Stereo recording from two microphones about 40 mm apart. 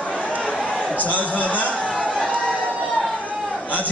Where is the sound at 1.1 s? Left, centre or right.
Left.